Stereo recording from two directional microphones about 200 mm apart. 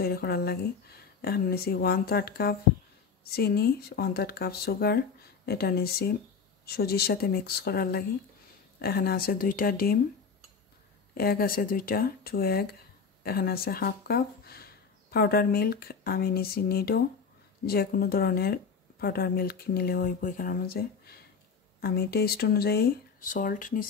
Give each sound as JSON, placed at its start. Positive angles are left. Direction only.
{"t": 0.0, "sound": "speech", "side_deg": 50}
{"t": 11.1, "sound": "speech", "side_deg": 50}